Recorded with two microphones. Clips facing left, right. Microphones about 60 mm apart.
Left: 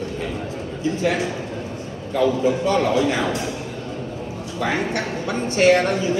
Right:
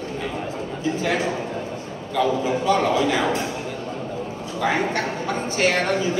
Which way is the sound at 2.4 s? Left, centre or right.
Right.